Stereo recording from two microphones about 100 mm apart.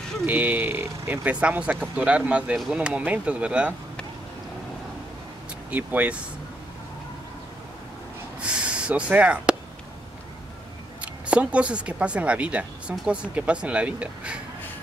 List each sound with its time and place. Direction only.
0.3 s speech: 15° right (ahead or behind)
1.3 s speech: 10° right (ahead or behind)
5.7 s speech: 15° right (ahead or behind)
8.4 s snort: 10° right (ahead or behind)
11.0 s speech: 10° right (ahead or behind)